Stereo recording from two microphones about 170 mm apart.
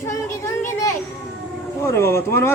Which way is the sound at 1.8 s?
15° left (ahead or behind).